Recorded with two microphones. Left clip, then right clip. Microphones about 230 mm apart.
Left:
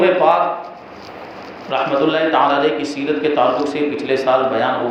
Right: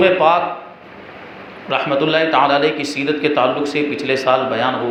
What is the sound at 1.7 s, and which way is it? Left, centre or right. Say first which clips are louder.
A man's voice: even; right.